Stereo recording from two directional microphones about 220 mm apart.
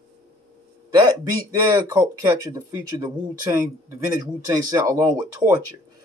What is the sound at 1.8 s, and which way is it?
Speech, 20° right (ahead or behind).